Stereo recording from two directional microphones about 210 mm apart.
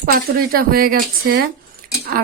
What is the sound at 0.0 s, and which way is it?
Speech, 45° right (ahead or behind).